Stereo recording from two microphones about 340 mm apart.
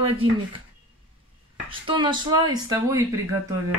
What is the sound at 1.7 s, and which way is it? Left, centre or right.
Speech, centre.